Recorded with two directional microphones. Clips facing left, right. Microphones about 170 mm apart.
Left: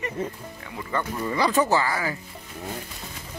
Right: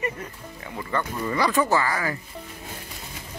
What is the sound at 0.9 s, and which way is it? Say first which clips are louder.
Speech: even; 15° left (ahead or behind).